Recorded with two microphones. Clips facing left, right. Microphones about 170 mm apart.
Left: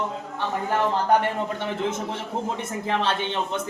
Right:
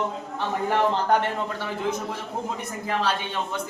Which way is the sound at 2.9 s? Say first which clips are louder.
Left 1 dB; 25° left (ahead or behind).